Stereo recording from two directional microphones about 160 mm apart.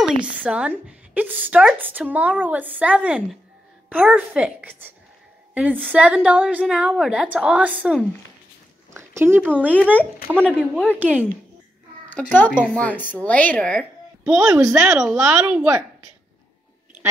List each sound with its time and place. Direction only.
0.0 s a woman's voice: 5° right (ahead or behind)
10.3 s speech: 5° left (ahead or behind)
11.0 s a woman's voice: 10° right (ahead or behind)
12.1 s a child's voice: 10° left (ahead or behind)
14.2 s speech: 5° right (ahead or behind)
14.6 s speech: 20° right (ahead or behind)
14.9 s speech: 5° right (ahead or behind)